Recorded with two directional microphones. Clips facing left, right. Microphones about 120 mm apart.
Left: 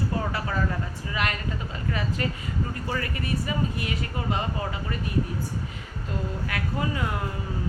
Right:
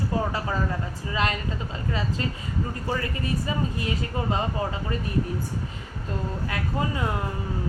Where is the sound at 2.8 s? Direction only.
25° right (ahead or behind).